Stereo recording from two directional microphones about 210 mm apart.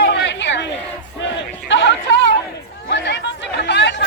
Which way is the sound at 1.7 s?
60° left (ahead or behind).